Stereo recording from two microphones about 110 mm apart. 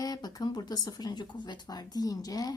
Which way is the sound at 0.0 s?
35° left (ahead or behind).